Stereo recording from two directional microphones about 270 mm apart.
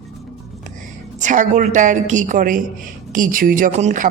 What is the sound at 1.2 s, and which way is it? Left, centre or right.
A man's voice, right.